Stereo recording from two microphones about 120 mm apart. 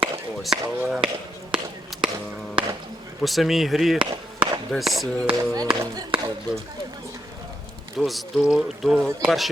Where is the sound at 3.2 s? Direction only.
Centre (ahead or behind).